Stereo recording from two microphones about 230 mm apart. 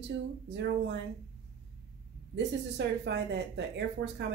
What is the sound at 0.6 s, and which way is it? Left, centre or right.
Speech, right.